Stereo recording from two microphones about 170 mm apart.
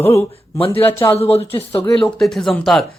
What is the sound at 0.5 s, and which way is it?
Speech, 35° left (ahead or behind).